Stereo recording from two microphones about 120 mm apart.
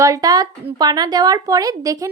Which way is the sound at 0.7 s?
35° right (ahead or behind).